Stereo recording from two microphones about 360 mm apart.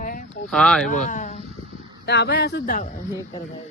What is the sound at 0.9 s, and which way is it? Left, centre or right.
Speech, left.